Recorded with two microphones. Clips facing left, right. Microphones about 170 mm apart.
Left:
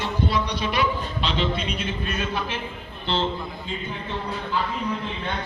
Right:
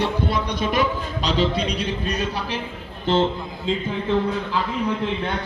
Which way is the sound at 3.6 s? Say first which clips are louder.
Right 13 dB; 90° right.